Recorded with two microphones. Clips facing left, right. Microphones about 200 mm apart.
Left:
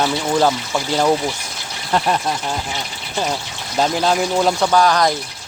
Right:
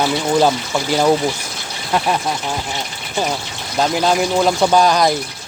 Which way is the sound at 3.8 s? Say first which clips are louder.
Right 1 dB; centre (ahead or behind).